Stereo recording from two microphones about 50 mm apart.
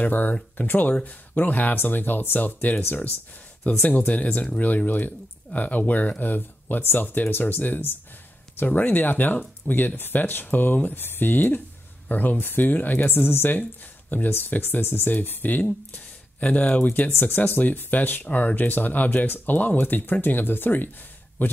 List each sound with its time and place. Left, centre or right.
0.0 s speech: left
3.8 s speech: left